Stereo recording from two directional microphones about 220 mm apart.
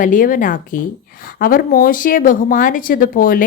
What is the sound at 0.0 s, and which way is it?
Speech, 35° left (ahead or behind).